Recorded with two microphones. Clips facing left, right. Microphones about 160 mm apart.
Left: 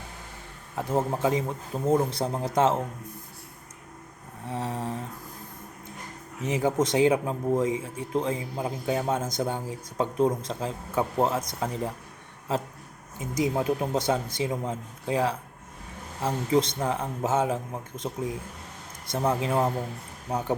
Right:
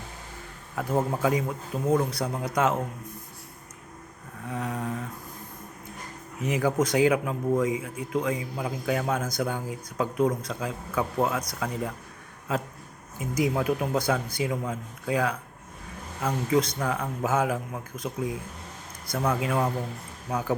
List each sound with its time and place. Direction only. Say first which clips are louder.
0.8 s speech: even; 25° left (ahead or behind)
4.4 s mantra: even; 30° left (ahead or behind)
6.4 s speech: even; 25° left (ahead or behind)
13.1 s speech: even; 25° left (ahead or behind)